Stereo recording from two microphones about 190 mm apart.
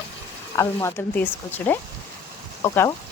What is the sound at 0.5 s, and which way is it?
Speech, 15° left (ahead or behind).